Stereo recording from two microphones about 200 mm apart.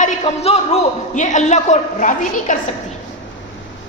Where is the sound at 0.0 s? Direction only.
35° left (ahead or behind).